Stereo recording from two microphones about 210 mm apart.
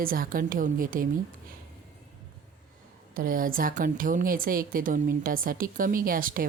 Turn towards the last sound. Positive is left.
turn(degrees=-40)  # may be behind; listen again after turning